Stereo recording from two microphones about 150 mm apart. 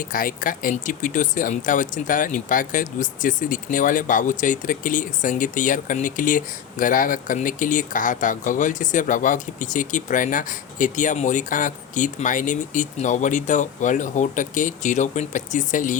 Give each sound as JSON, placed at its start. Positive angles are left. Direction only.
{"t": 0.0, "sound": "speech", "side_deg": 65}